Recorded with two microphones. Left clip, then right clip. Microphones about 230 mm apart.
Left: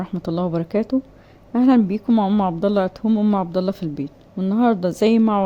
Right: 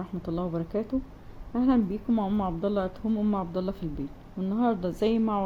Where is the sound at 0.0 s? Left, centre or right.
Left.